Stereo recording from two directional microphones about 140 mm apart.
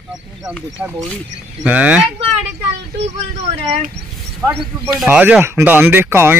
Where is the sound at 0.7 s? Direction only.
25° right (ahead or behind).